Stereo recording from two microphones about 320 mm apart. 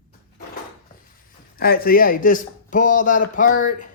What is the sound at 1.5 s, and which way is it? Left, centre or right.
A man's voice, left.